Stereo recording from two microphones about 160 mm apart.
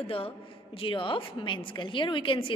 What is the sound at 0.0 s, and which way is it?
A woman's voice, 35° left (ahead or behind).